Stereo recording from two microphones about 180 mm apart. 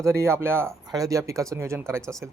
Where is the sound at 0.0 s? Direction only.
15° right (ahead or behind).